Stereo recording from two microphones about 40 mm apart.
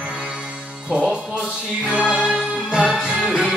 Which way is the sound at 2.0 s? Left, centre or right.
Right.